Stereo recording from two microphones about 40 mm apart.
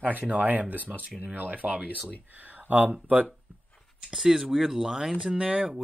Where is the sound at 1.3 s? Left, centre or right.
Right.